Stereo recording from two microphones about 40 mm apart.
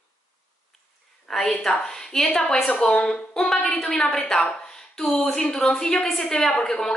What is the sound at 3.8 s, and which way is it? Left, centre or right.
Speech, left.